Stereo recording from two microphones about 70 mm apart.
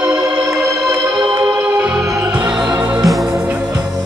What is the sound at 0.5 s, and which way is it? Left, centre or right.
Music, centre.